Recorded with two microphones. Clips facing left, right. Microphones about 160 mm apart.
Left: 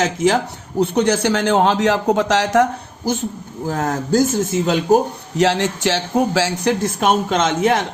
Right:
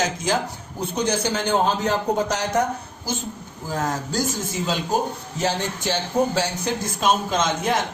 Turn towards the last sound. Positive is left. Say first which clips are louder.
# left 6 dB
turn(degrees=70)  # may be behind; listen again after turning